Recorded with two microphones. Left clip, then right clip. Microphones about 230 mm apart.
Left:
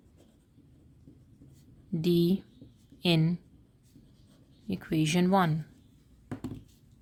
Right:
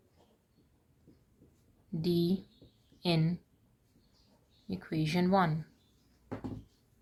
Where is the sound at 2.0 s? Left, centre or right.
Left.